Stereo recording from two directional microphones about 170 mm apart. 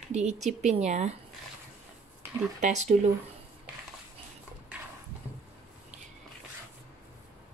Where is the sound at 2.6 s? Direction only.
45° right (ahead or behind).